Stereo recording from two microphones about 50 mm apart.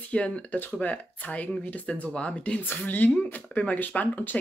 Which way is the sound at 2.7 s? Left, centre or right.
Left.